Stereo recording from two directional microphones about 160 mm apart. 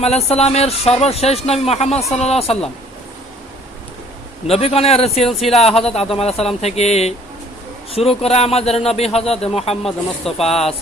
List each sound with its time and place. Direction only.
0.0 s speech: 40° left (ahead or behind)
4.4 s speech: 40° left (ahead or behind)